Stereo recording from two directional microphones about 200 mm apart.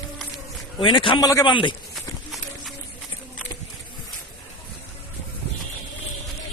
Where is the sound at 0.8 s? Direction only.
25° left (ahead or behind).